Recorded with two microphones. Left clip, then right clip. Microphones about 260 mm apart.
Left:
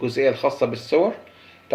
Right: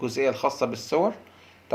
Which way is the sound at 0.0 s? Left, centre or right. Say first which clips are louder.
Left 4 dB; right.